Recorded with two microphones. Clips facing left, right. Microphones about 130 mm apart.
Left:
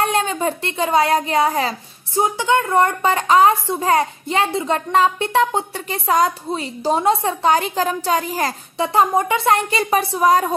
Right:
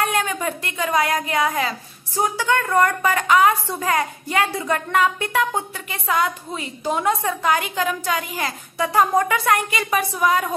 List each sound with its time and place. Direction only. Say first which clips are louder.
0.0 s speech: left 3 dB; 30° left (ahead or behind)
2.1 s speech: left 3 dB; 20° left (ahead or behind); by 8.5 s 35° left (ahead or behind)
8.7 s speech: left 1 dB; 25° left (ahead or behind)